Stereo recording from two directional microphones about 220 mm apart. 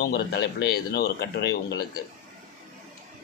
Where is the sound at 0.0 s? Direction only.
45° left (ahead or behind).